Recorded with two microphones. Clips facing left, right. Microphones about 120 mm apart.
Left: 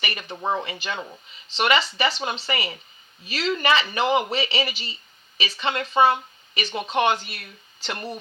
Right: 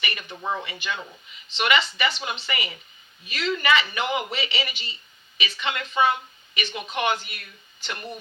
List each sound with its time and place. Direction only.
0.0 s speech: 35° left (ahead or behind)